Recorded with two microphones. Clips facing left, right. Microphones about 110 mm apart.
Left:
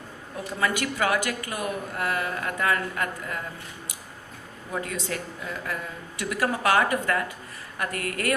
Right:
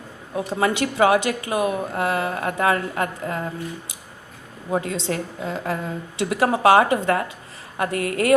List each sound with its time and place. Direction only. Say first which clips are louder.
0.5 s speech: right 5 dB; 25° right (ahead or behind)
4.7 s speech: right 7 dB; 25° right (ahead or behind)